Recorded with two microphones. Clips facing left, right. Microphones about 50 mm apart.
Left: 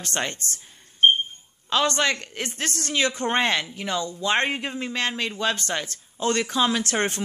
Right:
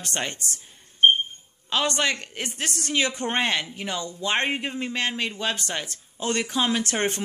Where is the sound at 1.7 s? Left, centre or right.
Centre.